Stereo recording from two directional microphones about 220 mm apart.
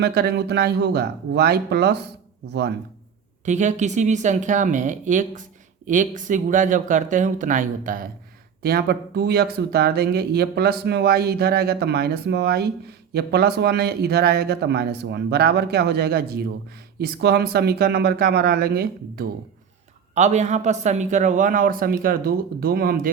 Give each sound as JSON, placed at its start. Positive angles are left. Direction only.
{"t": 0.0, "sound": "speech", "side_deg": -45}
{"t": 3.4, "sound": "speech", "side_deg": -35}
{"t": 20.1, "sound": "speech", "side_deg": -30}